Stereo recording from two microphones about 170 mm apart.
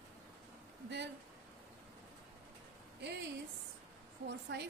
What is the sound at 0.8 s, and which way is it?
Speech, 90° right.